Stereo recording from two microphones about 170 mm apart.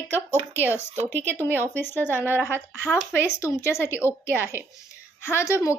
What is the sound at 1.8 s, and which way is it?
A woman's voice, 10° left (ahead or behind).